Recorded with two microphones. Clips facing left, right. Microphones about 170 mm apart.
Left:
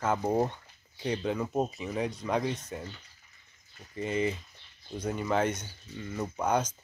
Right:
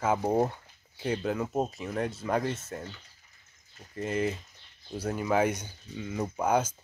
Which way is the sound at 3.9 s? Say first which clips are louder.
Even; centre (ahead or behind).